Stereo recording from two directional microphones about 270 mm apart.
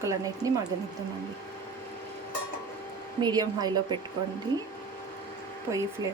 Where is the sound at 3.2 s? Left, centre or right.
Centre.